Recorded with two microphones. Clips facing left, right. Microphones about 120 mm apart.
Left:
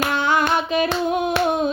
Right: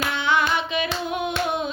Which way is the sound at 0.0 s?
45° left (ahead or behind).